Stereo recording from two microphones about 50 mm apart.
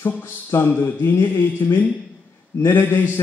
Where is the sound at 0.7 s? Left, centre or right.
Left.